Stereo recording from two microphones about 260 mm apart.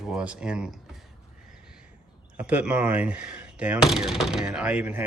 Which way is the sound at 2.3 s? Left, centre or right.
Centre.